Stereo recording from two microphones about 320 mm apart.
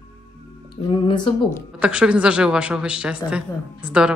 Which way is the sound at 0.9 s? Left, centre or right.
Centre.